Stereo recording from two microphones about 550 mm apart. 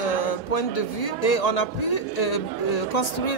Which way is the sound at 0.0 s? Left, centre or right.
Left.